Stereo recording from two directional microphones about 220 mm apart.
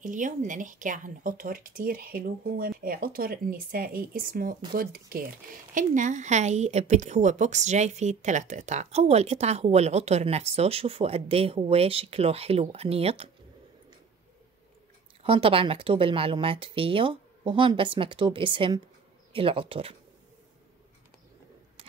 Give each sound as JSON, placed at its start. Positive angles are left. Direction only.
{"t": 0.0, "sound": "a woman's voice", "side_deg": -35}
{"t": 15.2, "sound": "a woman's voice", "side_deg": -25}